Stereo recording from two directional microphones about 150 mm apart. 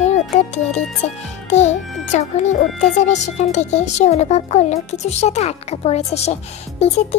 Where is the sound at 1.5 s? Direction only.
50° left (ahead or behind).